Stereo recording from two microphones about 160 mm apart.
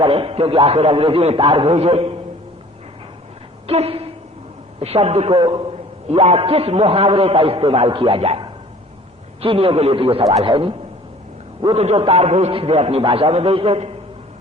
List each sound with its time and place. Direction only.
0.0 s a man's voice: 35° right (ahead or behind)
3.7 s a man's voice: 40° right (ahead or behind)